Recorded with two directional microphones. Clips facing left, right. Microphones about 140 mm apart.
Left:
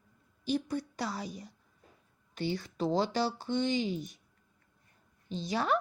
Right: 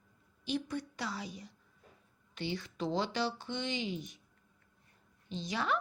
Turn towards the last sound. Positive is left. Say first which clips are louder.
# left 4 dB
turn(degrees=40)  # may be behind; listen again after turning